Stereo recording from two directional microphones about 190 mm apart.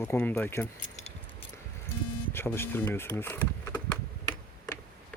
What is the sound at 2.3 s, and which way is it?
Speech, 10° left (ahead or behind).